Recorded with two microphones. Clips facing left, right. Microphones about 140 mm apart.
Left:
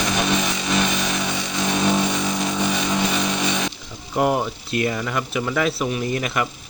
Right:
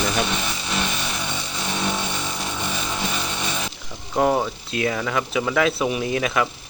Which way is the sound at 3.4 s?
90° left.